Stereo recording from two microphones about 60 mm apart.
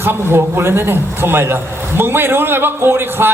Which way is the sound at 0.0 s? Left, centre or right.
Right.